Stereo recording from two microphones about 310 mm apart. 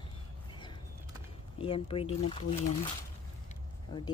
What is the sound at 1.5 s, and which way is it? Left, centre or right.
Speech, centre.